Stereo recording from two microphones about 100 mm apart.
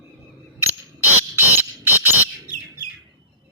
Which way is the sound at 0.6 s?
20° right (ahead or behind).